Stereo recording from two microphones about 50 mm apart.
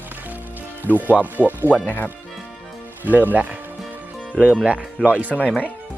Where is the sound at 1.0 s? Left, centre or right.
Right.